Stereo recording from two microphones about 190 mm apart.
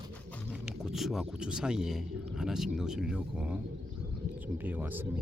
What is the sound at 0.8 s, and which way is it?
Speech, centre (ahead or behind).